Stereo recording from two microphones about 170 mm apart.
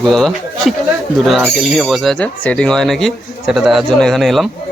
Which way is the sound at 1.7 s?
Centre (ahead or behind).